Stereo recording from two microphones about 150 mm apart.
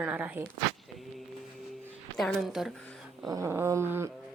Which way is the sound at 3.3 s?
15° right (ahead or behind).